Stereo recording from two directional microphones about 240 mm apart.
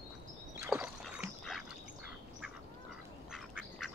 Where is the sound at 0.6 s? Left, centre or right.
Centre.